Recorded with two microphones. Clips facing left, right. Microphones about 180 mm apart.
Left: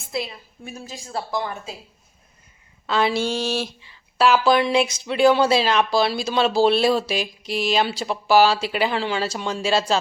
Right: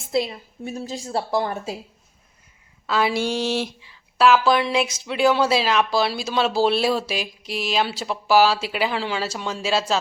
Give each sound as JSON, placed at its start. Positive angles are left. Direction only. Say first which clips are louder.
{"t": 0.1, "sound": "a woman's voice", "louder": "right 5 dB", "side_deg": -30}
{"t": 2.8, "sound": "a sound", "louder": "left 1 dB", "side_deg": -5}
{"t": 3.8, "sound": "speech", "louder": "right 1 dB", "side_deg": 0}